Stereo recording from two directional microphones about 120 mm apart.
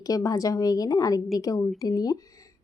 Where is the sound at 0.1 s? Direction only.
30° left (ahead or behind).